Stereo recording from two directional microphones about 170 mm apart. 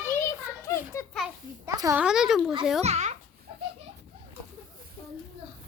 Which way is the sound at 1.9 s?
5° right (ahead or behind).